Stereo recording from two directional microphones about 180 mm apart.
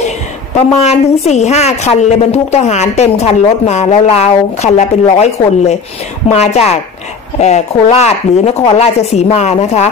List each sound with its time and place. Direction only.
0.7 s a woman's voice: 40° left (ahead or behind)